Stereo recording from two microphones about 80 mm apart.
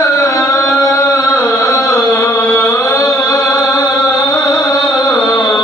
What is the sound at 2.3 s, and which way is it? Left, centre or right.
Music, left.